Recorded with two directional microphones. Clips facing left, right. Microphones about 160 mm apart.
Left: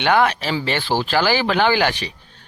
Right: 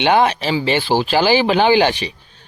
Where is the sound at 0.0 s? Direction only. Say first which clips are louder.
Right 3 dB; 20° right (ahead or behind).